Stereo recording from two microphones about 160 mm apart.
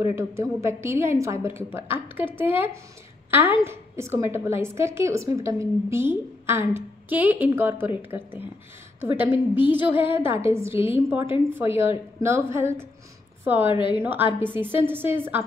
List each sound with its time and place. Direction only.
0.1 s a woman's voice: 15° right (ahead or behind)
13.7 s a woman's voice: 30° left (ahead or behind)
14.0 s a woman's voice: 10° right (ahead or behind)